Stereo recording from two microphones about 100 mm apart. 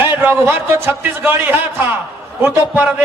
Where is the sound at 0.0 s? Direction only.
20° right (ahead or behind).